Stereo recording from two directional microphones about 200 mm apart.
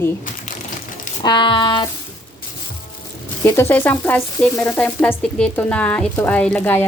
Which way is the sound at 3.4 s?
15° left (ahead or behind).